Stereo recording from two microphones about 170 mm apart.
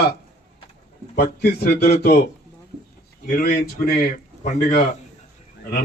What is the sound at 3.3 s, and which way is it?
Speech, 55° left (ahead or behind).